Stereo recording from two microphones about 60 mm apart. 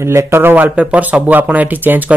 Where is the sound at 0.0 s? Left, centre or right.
Right.